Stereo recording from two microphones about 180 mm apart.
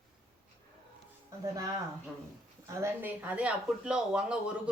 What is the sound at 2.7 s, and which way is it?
Speech, 15° right (ahead or behind).